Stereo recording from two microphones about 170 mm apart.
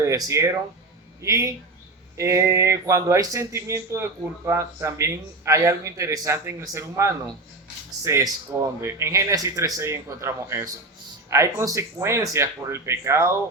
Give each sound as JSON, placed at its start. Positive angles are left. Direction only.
{"t": 0.0, "sound": "speech", "side_deg": -20}